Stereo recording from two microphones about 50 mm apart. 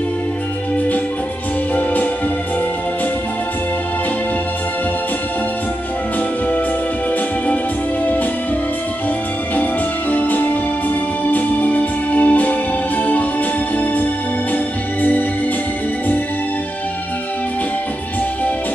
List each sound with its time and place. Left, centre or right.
10.1 s music: left
15.0 s music: left